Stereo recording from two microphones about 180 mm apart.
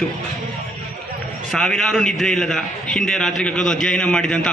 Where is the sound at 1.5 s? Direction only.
5° left (ahead or behind).